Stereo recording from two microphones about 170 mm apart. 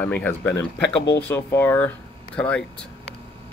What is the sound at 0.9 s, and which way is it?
Speech, 90° left.